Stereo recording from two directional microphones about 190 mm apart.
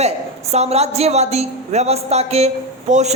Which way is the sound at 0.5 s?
35° right (ahead or behind).